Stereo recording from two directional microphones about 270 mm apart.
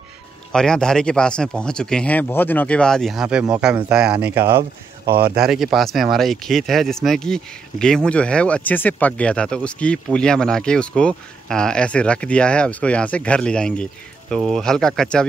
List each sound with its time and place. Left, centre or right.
0.5 s speech: centre
5.0 s speech: right
5.3 s speech: centre